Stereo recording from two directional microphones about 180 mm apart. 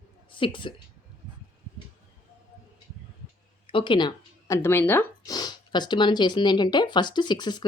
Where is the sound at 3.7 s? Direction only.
30° left (ahead or behind).